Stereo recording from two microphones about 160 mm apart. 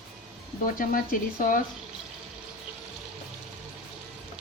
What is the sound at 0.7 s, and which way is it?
Speech, 60° left (ahead or behind).